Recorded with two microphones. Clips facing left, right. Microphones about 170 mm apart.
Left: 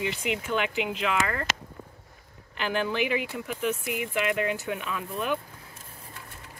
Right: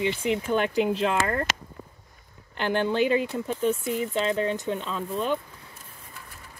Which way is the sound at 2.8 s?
30° right (ahead or behind).